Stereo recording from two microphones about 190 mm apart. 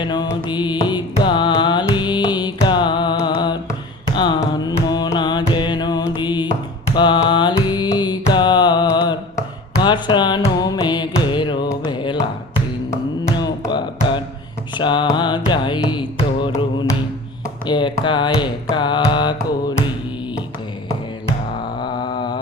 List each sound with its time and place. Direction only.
0.0 s music: 25° left (ahead or behind)
0.9 s carnatic music: 25° left (ahead or behind)
1.9 s music: 25° left (ahead or behind)
3.2 s carnatic music: 25° left (ahead or behind)
5.5 s music: 25° left (ahead or behind)
9.8 s carnatic music: 25° left (ahead or behind)
21.8 s a sound: 25° left (ahead or behind)